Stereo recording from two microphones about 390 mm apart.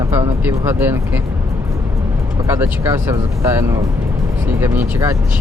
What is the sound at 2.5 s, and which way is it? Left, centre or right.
Speech, centre.